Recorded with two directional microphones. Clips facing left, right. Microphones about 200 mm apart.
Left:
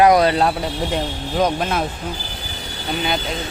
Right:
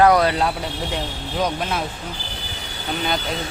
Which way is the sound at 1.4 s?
50° left (ahead or behind).